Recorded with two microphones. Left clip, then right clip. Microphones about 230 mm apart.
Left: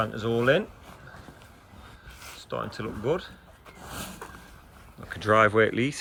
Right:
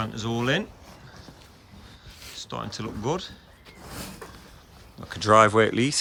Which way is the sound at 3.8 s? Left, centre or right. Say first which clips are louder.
Left 1 dB; left.